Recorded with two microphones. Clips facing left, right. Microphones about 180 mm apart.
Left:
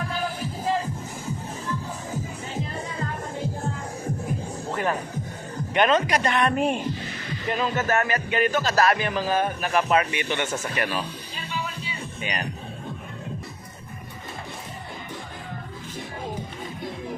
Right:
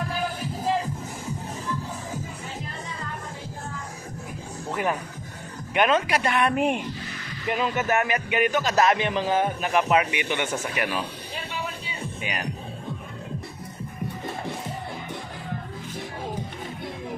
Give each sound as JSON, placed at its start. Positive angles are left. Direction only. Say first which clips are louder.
{"t": 5.7, "sound": "speech", "louder": "left 1 dB", "side_deg": -5}
{"t": 12.2, "sound": "speech", "louder": "left 2 dB", "side_deg": -5}